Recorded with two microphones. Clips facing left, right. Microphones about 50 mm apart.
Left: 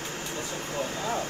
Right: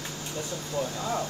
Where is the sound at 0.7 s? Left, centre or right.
Left.